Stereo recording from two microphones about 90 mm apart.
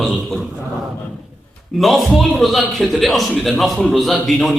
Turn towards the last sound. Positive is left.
turn(degrees=5)  # may be behind; listen again after turning